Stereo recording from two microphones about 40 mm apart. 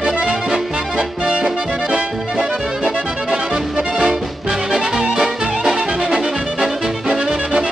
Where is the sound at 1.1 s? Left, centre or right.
Right.